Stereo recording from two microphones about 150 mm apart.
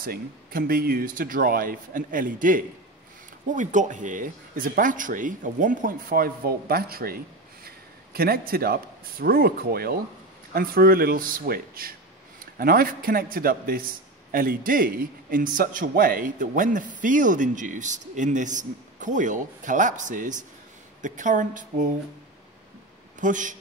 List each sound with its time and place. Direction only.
0.0 s a man's voice: 75° right (ahead or behind); by 21.8 s 60° right (ahead or behind)
23.2 s a man's voice: 60° right (ahead or behind)